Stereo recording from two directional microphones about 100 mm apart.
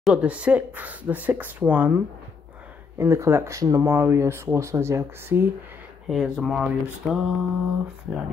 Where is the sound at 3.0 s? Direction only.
30° right (ahead or behind).